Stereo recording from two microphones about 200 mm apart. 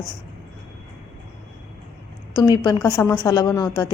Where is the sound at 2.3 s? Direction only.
20° left (ahead or behind).